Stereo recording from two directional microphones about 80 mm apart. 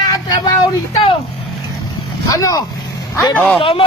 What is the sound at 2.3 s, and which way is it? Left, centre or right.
Speech, left.